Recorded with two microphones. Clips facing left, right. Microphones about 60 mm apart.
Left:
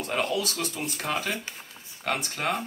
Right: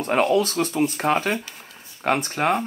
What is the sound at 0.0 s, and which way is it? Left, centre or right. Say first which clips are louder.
Speech: right 8 dB; right.